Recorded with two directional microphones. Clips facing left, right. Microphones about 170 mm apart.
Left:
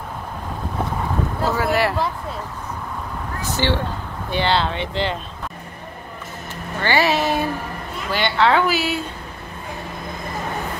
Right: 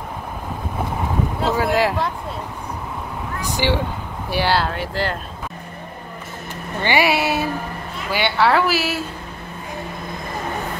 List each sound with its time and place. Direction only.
1.5 s speech: 15° right (ahead or behind)
3.4 s speech: 15° right (ahead or behind)
6.8 s speech: 15° right (ahead or behind)